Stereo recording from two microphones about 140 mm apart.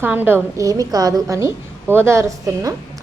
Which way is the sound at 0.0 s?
15° right (ahead or behind).